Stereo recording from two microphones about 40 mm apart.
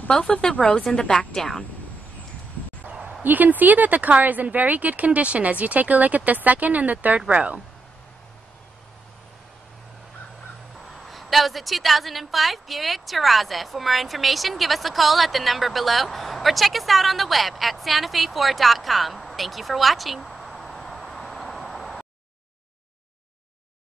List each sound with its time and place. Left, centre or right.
0.1 s a woman's voice: left
2.8 s bow-wow: right
3.2 s speech: right
10.9 s a woman's voice: centre